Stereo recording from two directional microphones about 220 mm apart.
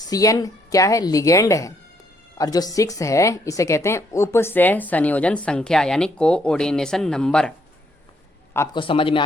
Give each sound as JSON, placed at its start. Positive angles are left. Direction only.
{"t": 0.0, "sound": "a woman's voice", "side_deg": 15}
{"t": 8.5, "sound": "a woman's voice", "side_deg": 10}
{"t": 8.8, "sound": "speech", "side_deg": 25}